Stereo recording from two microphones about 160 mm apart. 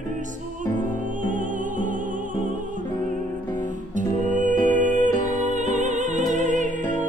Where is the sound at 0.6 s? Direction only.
55° right (ahead or behind).